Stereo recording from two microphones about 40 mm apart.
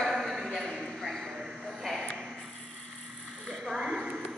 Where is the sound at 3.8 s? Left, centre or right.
Right.